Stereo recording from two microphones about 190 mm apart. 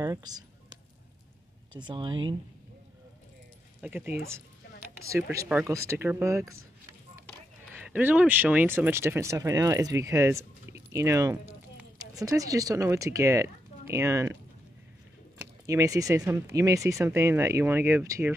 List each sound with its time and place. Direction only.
0.0 s a sound: 20° right (ahead or behind)
1.8 s speech: 25° right (ahead or behind)
3.8 s speech: 10° right (ahead or behind)
5.1 s speech: 15° right (ahead or behind)
7.7 s speech: 10° right (ahead or behind)
15.6 s speech: 20° right (ahead or behind)